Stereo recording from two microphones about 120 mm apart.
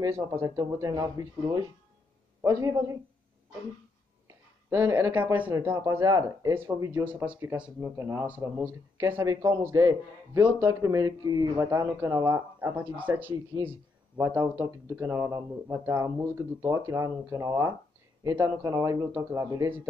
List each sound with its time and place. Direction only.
0.0 s a man's voice: 25° right (ahead or behind)
4.6 s speech: 20° right (ahead or behind)
5.8 s a man's voice: 30° right (ahead or behind)
6.5 s a man's voice: 15° right (ahead or behind)
12.5 s a man's voice: 15° right (ahead or behind)